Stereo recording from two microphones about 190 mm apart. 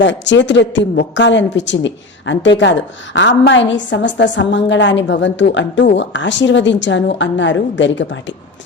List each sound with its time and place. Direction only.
0.0 s a woman's voice: 70° left (ahead or behind)